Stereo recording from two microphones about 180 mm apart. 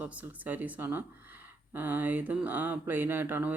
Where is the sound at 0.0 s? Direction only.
10° right (ahead or behind).